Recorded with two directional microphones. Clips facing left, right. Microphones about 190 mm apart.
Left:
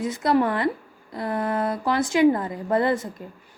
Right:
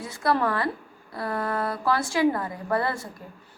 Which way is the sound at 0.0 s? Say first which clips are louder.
Left 4 dB; 20° left (ahead or behind).